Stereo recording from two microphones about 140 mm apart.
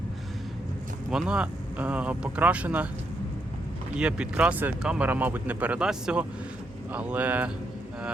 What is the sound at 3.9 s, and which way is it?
Speech, 5° right (ahead or behind).